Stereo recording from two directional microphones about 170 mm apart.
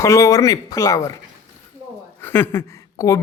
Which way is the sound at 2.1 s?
15° left (ahead or behind).